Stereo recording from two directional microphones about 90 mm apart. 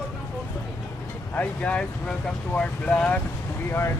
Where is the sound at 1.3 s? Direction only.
15° left (ahead or behind).